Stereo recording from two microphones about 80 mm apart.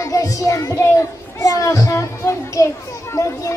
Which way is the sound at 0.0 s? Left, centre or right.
Left.